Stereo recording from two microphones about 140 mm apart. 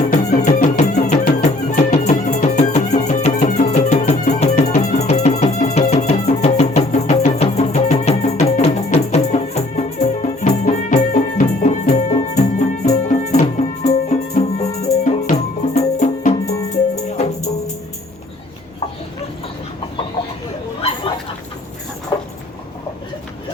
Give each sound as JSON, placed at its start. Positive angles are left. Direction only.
{"t": 0.0, "sound": "music", "side_deg": 55}